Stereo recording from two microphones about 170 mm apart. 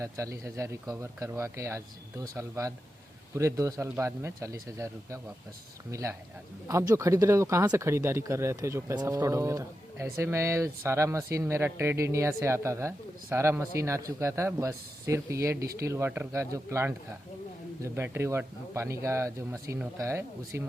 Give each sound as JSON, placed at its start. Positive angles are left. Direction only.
{"t": 0.0, "sound": "speech", "side_deg": -15}